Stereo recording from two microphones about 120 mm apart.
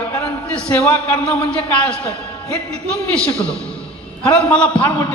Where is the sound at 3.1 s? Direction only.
10° left (ahead or behind).